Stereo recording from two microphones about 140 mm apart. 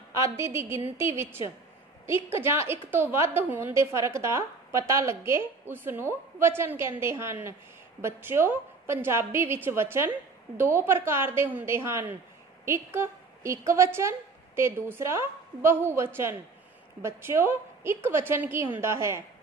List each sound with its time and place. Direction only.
0.1 s a woman's voice: 20° right (ahead or behind)